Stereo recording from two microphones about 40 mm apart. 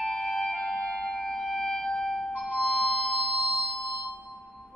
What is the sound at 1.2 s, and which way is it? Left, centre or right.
Music, centre.